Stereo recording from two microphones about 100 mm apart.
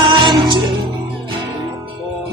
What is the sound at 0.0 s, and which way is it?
Music, 50° right (ahead or behind).